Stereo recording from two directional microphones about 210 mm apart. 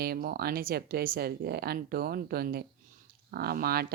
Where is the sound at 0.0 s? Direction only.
45° right (ahead or behind).